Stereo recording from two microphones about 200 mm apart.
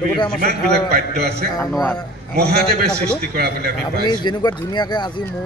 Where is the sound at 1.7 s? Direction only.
Centre (ahead or behind).